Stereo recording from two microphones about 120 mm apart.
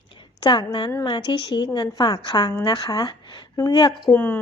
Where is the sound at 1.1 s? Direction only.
40° left (ahead or behind).